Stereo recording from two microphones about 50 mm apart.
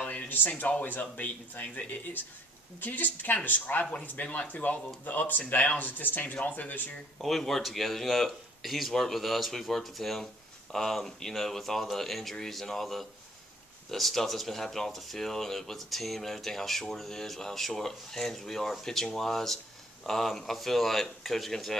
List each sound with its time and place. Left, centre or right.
0.0 s speech: left
7.2 s speech: centre